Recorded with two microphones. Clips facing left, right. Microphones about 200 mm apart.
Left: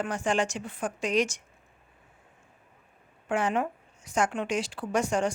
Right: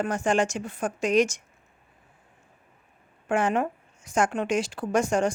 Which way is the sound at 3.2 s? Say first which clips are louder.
Right 3 dB; 50° right (ahead or behind).